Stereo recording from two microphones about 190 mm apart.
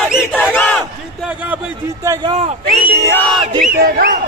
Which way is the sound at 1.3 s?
10° right (ahead or behind).